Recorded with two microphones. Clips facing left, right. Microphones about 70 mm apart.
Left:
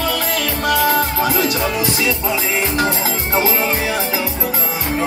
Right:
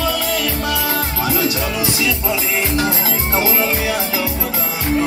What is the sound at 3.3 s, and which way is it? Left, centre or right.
Music, left.